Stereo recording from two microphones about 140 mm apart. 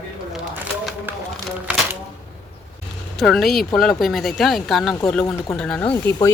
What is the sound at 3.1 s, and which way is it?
Speech, centre (ahead or behind).